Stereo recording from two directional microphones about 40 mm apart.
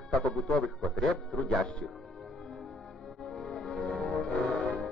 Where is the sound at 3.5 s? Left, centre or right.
Centre.